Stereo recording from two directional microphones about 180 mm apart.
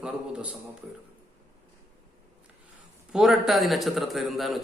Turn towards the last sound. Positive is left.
turn(degrees=0)  # may be behind; listen again after turning